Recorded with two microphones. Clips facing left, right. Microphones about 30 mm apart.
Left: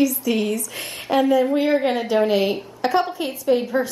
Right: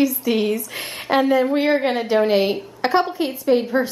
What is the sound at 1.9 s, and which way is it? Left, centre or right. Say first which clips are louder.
A woman's voice: right 1 dB; centre.